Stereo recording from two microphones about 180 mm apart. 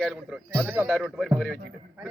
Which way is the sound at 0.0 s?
Centre (ahead or behind).